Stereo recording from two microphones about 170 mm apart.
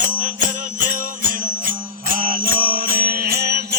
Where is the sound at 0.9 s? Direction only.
55° right (ahead or behind).